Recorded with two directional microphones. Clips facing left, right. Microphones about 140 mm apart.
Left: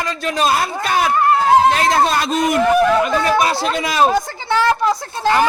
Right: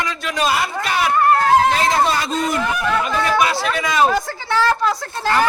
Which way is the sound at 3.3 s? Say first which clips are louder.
Left 2 dB; 35° left (ahead or behind).